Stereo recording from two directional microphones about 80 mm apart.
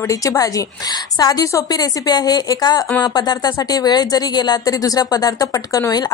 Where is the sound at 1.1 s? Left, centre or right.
Left.